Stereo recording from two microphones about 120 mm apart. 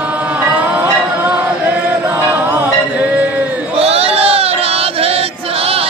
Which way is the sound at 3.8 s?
55° right (ahead or behind).